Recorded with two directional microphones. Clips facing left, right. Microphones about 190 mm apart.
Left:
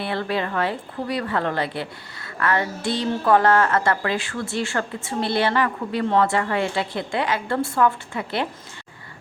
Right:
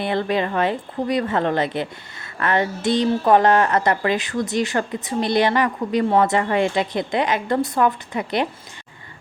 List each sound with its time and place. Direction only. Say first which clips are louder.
0.0 s a woman's voice: right 4 dB; 20° right (ahead or behind)